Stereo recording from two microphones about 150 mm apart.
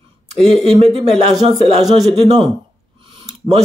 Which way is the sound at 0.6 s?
40° right (ahead or behind).